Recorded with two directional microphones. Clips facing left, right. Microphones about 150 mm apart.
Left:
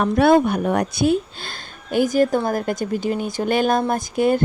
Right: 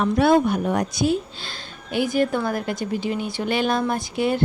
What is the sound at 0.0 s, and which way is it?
Speech, 55° left (ahead or behind).